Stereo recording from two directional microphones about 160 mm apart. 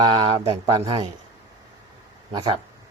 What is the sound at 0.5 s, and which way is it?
Speech, 25° right (ahead or behind).